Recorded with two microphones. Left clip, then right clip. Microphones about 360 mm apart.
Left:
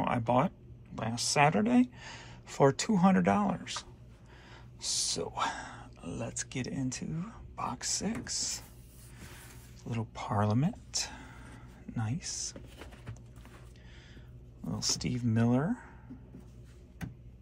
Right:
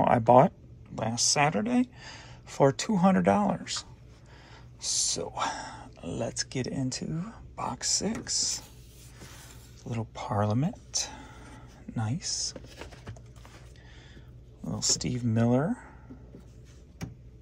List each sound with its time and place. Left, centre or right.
0.0 s speech: centre
9.8 s speech: centre
14.6 s speech: centre